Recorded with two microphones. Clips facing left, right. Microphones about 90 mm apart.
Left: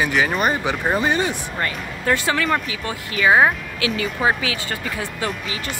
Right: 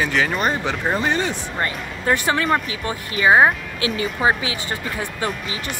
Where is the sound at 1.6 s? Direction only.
20° right (ahead or behind).